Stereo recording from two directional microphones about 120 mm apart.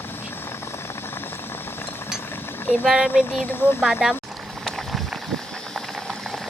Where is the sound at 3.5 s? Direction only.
20° left (ahead or behind).